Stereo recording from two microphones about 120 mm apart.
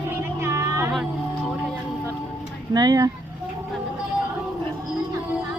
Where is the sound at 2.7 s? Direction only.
30° right (ahead or behind).